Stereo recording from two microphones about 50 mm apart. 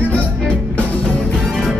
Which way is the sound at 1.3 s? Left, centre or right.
Centre.